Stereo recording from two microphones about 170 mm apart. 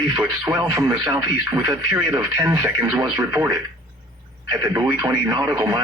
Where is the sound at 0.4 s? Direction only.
20° right (ahead or behind).